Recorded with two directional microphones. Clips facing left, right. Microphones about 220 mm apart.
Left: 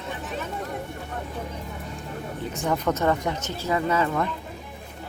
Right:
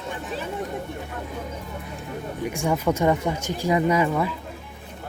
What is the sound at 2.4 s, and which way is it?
Speech, 10° right (ahead or behind).